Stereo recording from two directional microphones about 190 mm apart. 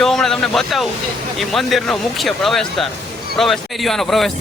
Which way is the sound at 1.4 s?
Centre (ahead or behind).